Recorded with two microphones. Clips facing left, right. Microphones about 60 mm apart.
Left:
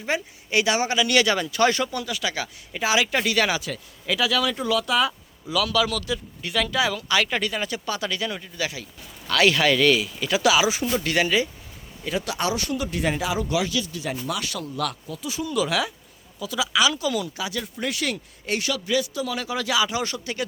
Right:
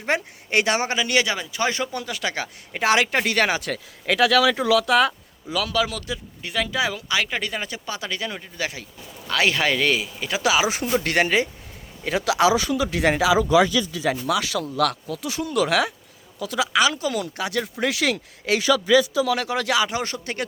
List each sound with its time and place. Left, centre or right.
0.0 s speech: right
3.6 s speech: right
5.5 s speech: right
8.5 s speech: right
9.2 s speech: right
10.9 s speech: right
12.0 s speech: right
14.1 s speech: right
15.4 s speech: right
17.7 s speech: right
19.2 s speech: right